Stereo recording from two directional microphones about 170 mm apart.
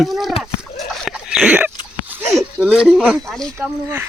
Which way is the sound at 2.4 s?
5° right (ahead or behind).